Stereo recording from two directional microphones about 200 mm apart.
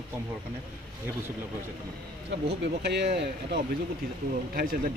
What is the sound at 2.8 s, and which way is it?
Speech, 55° right (ahead or behind).